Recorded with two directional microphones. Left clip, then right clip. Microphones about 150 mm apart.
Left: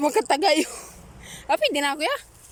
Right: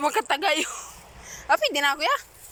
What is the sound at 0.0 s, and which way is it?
A man's voice, 35° left (ahead or behind).